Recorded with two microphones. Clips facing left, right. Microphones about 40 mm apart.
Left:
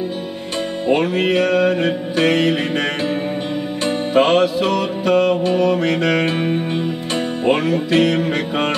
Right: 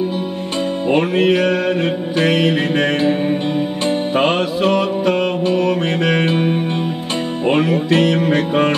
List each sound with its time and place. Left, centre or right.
0.8 s music: right
2.8 s music: right
7.5 s music: right